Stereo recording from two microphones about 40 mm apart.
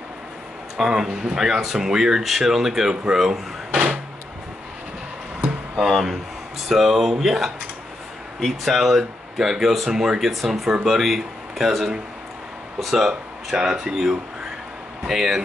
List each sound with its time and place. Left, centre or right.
0.7 s speech: centre
5.4 s a sound: centre
6.7 s speech: centre
12.9 s speech: centre
15.0 s speech: centre